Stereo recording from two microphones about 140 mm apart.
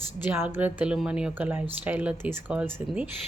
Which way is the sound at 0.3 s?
15° right (ahead or behind).